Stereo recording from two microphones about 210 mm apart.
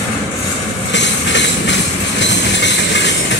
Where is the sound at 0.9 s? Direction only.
60° left (ahead or behind).